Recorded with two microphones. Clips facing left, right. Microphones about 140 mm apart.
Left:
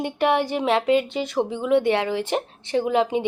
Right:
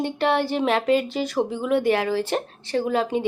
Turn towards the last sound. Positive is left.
turn(degrees=20)  # may be behind; listen again after turning